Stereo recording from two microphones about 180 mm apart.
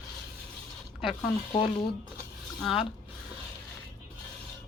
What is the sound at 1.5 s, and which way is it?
Speech, 25° left (ahead or behind).